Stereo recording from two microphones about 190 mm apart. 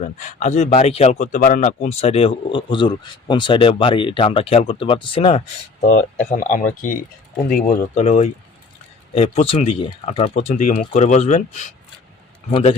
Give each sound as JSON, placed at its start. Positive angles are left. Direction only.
{"t": 0.0, "sound": "a man's voice", "side_deg": 40}
{"t": 6.2, "sound": "speech", "side_deg": 45}